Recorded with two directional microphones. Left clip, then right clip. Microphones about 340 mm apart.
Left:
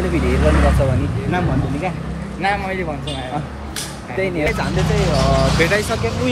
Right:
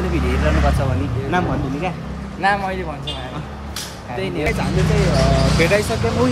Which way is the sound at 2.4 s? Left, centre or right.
Centre.